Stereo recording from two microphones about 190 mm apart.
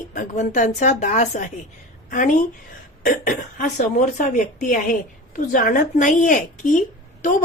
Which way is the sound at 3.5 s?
40° left (ahead or behind).